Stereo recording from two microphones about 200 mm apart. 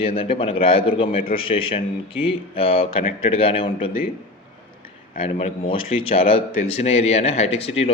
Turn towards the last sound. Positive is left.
turn(degrees=30)  # may be behind; listen again after turning